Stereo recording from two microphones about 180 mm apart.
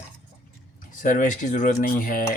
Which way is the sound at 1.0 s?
45° left (ahead or behind).